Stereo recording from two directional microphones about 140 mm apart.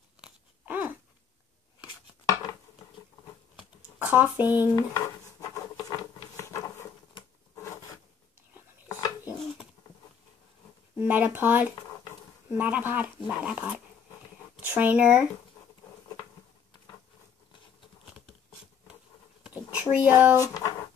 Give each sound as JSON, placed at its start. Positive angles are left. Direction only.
{"t": 0.2, "sound": "biting", "side_deg": -10}
{"t": 4.0, "sound": "speech", "side_deg": -10}
{"t": 4.7, "sound": "dishes", "side_deg": 25}
{"t": 6.3, "sound": "patter", "side_deg": 20}
{"t": 7.5, "sound": "zipper", "side_deg": 20}
{"t": 8.8, "sound": "a sound", "side_deg": 25}
{"t": 11.0, "sound": "speech", "side_deg": -15}
{"t": 19.4, "sound": "a sound", "side_deg": -10}
{"t": 20.3, "sound": "speech", "side_deg": 25}